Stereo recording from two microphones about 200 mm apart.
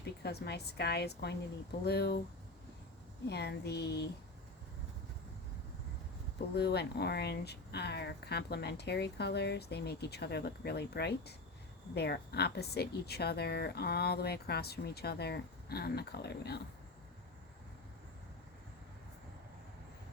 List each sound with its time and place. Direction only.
0.0 s speech: 55° left (ahead or behind)
3.2 s speech: 55° left (ahead or behind)
6.6 s speech: 55° left (ahead or behind)